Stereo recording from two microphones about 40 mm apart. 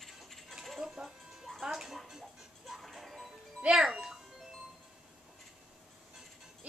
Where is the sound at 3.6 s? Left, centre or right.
Right.